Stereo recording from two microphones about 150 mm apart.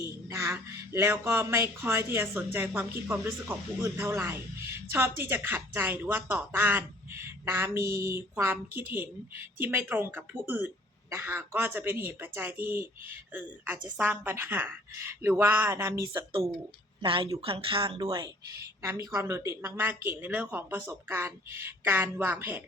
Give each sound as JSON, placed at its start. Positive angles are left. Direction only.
{"t": 0.0, "sound": "speech", "side_deg": -20}
{"t": 13.9, "sound": "speech", "side_deg": -10}
{"t": 16.0, "sound": "speech", "side_deg": -35}
{"t": 18.0, "sound": "speech", "side_deg": -25}